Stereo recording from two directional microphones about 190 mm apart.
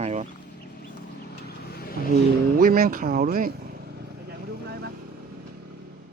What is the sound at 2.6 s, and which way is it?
Speech, 50° right (ahead or behind).